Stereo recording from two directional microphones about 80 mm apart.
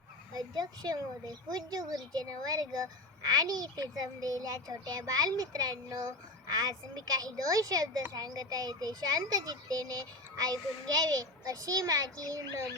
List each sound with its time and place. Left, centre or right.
0.3 s a child's voice: right